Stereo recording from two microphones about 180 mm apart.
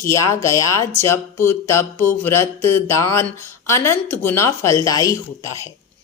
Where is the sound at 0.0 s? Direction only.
15° left (ahead or behind).